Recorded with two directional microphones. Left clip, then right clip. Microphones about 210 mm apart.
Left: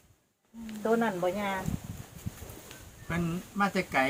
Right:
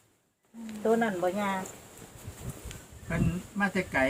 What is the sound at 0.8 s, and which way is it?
Speech, 20° right (ahead or behind).